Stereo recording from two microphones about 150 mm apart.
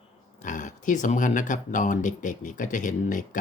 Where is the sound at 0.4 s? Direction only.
55° left (ahead or behind).